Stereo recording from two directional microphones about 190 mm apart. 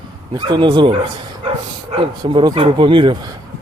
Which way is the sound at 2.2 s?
25° right (ahead or behind).